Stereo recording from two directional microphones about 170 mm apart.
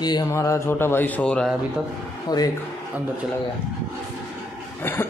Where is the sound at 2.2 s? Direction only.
20° left (ahead or behind).